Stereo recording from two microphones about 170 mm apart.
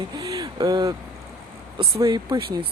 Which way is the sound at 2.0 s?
25° right (ahead or behind).